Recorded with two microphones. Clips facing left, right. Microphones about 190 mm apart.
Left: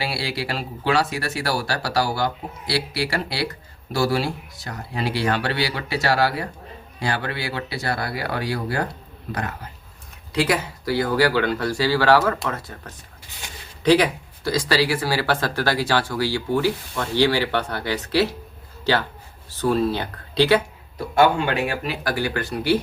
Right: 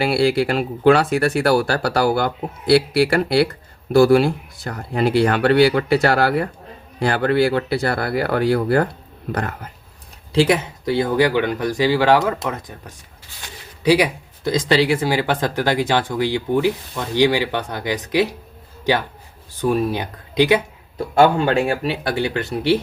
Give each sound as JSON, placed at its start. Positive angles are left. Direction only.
{"t": 0.0, "sound": "speech", "side_deg": -55}
{"t": 10.3, "sound": "speech", "side_deg": -25}
{"t": 13.8, "sound": "speech", "side_deg": -10}
{"t": 21.2, "sound": "speech", "side_deg": -35}